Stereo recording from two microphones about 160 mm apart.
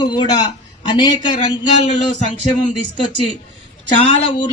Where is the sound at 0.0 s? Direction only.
25° left (ahead or behind).